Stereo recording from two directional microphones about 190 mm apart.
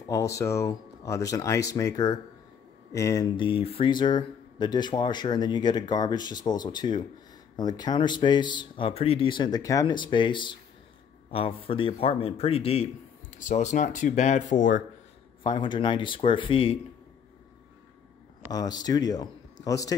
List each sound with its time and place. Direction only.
0.1 s a man's voice: 15° left (ahead or behind); by 14.8 s 40° left (ahead or behind)
15.4 s speech: 25° left (ahead or behind)
18.5 s speech: 20° left (ahead or behind)